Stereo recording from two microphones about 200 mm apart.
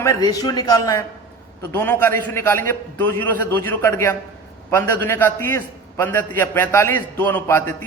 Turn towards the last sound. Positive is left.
turn(degrees=10)  # may be behind; listen again after turning